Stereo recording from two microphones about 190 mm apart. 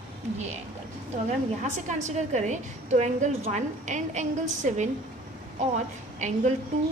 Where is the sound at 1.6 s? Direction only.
40° right (ahead or behind).